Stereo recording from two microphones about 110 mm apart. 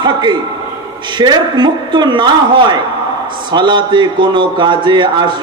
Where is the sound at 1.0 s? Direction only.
40° right (ahead or behind).